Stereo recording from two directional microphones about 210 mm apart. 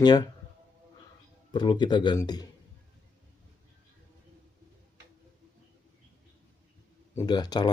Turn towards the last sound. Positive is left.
turn(degrees=20)  # may be behind; listen again after turning